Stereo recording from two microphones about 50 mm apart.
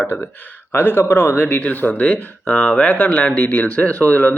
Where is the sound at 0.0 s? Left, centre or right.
Left.